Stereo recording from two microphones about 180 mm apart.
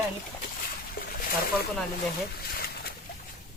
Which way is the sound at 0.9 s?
55° left (ahead or behind).